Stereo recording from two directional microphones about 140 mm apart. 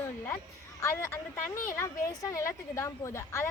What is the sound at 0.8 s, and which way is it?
A woman's voice, 20° left (ahead or behind).